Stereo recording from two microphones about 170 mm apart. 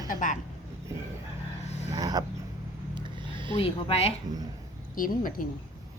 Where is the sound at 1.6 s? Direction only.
40° left (ahead or behind).